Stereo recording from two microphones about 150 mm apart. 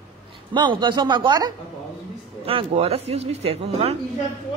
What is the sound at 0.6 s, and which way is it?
Speech, 30° right (ahead or behind).